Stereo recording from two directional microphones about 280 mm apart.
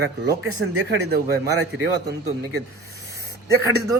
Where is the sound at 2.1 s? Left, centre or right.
Right.